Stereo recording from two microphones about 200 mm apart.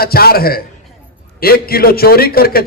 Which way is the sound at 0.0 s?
50° left (ahead or behind).